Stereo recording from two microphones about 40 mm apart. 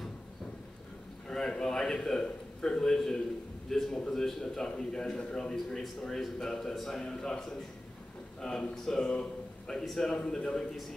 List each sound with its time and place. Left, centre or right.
1.6 s a man's voice: centre
9.1 s a sound: left
9.8 s a man's voice: centre
10.1 s a man's voice: left